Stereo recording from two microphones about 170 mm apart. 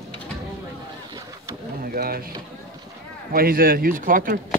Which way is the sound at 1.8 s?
60° right (ahead or behind).